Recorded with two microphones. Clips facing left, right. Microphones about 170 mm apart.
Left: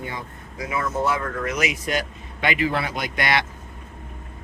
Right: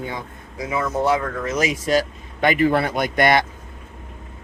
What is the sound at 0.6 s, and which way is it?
Speech, 25° right (ahead or behind).